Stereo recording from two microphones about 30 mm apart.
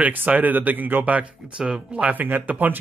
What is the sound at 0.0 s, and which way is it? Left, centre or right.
Speech, right.